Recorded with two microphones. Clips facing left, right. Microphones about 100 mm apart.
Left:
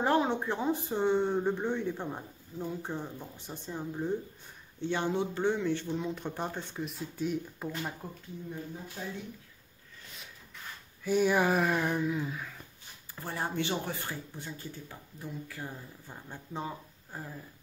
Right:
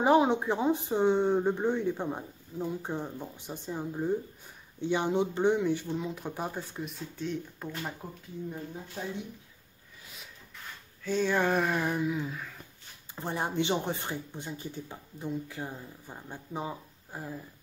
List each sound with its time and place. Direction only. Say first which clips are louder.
0.0 s speech: right 4 dB; 10° right (ahead or behind)
5.9 s speech: even; 5° right (ahead or behind)
11.1 s speech: left 1 dB; 10° left (ahead or behind)
13.1 s speech: right 3 dB; 20° right (ahead or behind)